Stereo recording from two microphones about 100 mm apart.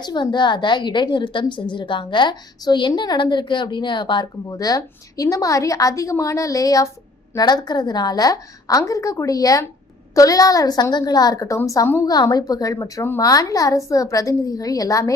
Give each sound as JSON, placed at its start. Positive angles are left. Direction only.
{"t": 0.0, "sound": "a woman's voice", "side_deg": 45}
{"t": 4.4, "sound": "a woman's voice", "side_deg": 40}
{"t": 12.0, "sound": "a woman's voice", "side_deg": 40}